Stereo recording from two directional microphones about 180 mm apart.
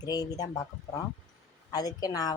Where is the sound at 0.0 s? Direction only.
20° left (ahead or behind).